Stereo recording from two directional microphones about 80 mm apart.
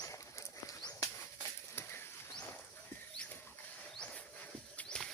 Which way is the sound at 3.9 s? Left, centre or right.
Centre.